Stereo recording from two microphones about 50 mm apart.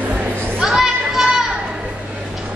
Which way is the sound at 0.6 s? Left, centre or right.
Centre.